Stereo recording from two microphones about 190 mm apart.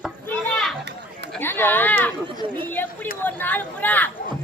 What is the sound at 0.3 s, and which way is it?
Children playing, centre (ahead or behind).